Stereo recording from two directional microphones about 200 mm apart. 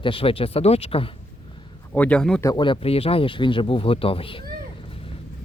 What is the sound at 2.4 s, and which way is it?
Speech, 20° left (ahead or behind).